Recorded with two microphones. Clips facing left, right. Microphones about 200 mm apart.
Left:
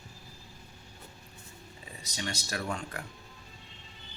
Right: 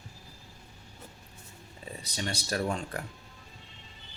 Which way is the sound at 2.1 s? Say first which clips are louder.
Right 4 dB; 35° right (ahead or behind).